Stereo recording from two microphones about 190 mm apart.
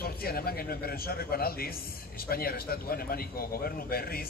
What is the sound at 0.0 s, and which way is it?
A man's voice, 55° left (ahead or behind).